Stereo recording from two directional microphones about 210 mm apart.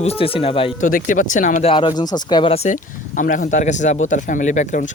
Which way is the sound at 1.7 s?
20° left (ahead or behind).